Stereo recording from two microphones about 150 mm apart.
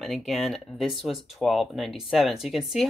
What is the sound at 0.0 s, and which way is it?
Speech, centre (ahead or behind).